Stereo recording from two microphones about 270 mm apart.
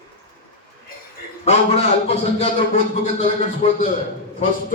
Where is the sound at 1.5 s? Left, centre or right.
Left.